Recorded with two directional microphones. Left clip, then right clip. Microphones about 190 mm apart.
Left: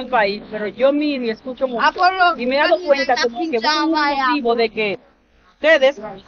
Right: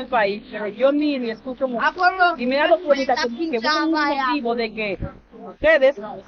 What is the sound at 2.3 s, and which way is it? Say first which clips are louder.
Speech: left 2 dB; 20° left (ahead or behind).